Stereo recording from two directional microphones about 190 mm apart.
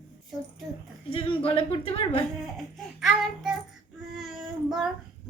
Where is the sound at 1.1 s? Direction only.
30° left (ahead or behind).